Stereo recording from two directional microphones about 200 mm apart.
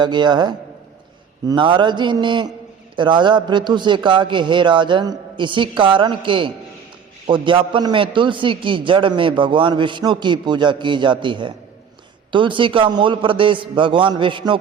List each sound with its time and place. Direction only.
0.0 s a man's voice: 20° right (ahead or behind)